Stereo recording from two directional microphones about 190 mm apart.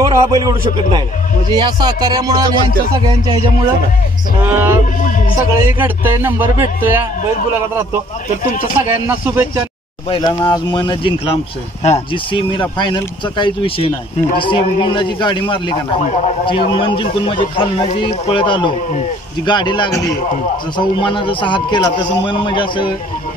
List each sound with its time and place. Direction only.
0.0 s a man's voice: 20° right (ahead or behind)
4.5 s speech: 10° right (ahead or behind)
9.0 s speech: 10° right (ahead or behind)
10.0 s speech: 25° left (ahead or behind)